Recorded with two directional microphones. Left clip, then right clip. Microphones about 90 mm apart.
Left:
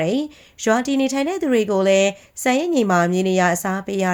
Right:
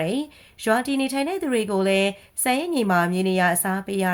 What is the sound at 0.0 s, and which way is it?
A woman's voice, 30° left (ahead or behind).